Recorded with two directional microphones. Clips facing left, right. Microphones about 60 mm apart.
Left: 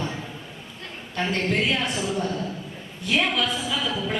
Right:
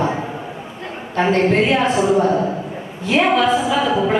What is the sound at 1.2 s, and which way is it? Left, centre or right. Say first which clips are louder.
Speech: right 9 dB; right.